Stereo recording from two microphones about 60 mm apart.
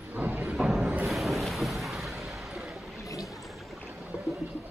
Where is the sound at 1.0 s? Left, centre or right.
Centre.